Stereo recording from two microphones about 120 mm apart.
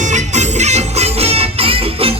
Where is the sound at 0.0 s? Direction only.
85° right.